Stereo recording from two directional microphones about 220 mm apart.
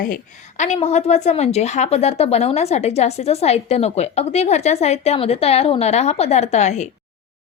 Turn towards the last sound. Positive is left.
turn(degrees=30)  # may be behind; listen again after turning